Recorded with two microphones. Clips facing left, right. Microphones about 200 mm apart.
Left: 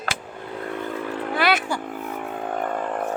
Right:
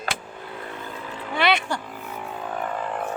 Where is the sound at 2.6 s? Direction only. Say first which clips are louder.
Left 2 dB; 45° left (ahead or behind).